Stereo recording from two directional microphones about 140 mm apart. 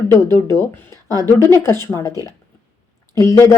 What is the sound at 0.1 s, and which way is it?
A woman's voice, 20° left (ahead or behind).